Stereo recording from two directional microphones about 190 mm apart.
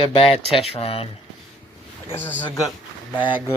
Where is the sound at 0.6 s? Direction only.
30° left (ahead or behind).